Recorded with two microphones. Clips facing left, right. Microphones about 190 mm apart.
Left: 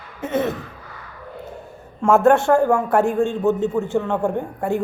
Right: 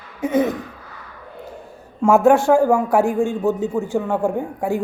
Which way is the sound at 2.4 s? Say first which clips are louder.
Right 2 dB; 5° right (ahead or behind).